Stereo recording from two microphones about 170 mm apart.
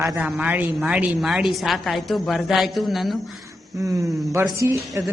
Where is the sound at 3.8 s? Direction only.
20° right (ahead or behind).